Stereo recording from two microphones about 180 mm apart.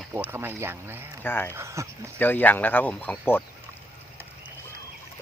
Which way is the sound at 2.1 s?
10° left (ahead or behind).